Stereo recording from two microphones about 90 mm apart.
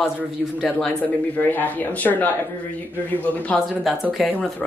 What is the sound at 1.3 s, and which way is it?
Speech, 20° left (ahead or behind).